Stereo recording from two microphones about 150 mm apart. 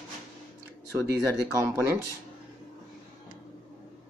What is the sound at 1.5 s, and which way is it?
Speech, 15° right (ahead or behind).